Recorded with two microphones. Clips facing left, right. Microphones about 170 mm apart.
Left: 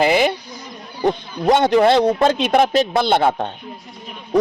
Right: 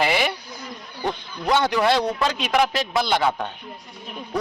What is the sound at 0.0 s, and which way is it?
Speech, 25° left (ahead or behind).